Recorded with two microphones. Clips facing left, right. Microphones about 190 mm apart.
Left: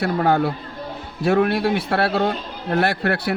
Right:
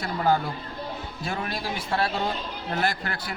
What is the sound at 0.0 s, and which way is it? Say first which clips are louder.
A man's voice: left 6 dB; 65° left (ahead or behind).